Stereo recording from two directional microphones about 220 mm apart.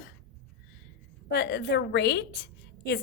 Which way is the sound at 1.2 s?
50° left (ahead or behind).